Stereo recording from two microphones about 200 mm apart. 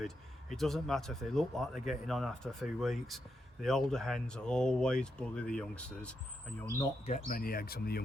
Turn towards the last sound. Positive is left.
turn(degrees=50)  # may be behind; listen again after turning